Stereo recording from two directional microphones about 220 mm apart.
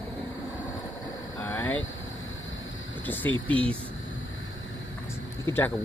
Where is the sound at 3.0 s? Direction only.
10° left (ahead or behind).